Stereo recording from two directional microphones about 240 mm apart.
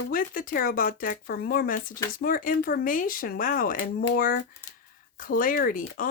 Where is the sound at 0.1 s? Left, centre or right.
Left.